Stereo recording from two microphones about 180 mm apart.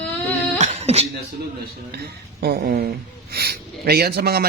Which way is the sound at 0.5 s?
40° right (ahead or behind).